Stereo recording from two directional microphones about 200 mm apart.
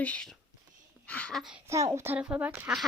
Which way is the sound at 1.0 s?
5° left (ahead or behind).